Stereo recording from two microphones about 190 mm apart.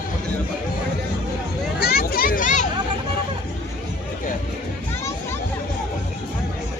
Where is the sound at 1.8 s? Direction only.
55° left (ahead or behind).